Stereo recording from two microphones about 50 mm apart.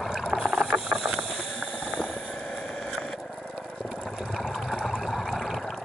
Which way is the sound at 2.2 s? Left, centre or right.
Left.